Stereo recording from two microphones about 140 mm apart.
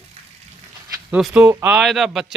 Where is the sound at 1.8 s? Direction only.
Centre (ahead or behind).